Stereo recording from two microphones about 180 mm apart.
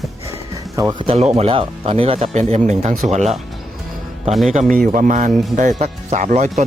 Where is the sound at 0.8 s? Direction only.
25° right (ahead or behind); by 3.3 s 40° right (ahead or behind).